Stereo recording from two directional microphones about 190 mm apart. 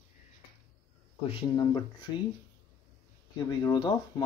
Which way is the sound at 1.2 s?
25° left (ahead or behind).